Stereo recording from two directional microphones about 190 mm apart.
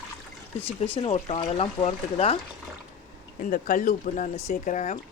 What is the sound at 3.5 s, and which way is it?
Speech, 45° left (ahead or behind).